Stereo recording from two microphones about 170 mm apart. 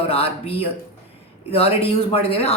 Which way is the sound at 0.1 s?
35° left (ahead or behind).